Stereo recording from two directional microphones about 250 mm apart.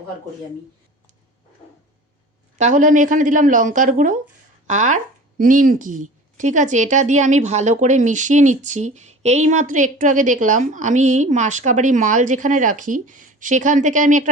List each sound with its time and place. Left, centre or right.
2.6 s a woman's voice: right